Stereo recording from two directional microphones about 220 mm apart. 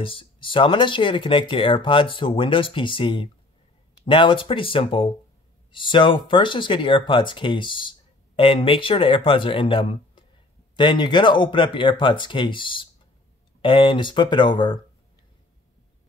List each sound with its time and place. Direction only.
0.0 s speech: 25° left (ahead or behind)